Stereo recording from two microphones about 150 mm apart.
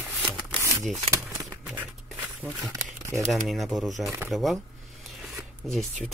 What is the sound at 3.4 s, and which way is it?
Speech, centre (ahead or behind).